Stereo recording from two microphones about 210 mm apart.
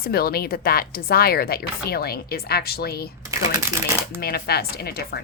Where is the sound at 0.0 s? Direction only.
45° left (ahead or behind).